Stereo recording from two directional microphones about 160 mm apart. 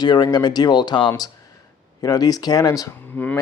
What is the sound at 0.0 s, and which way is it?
Speech, 25° left (ahead or behind).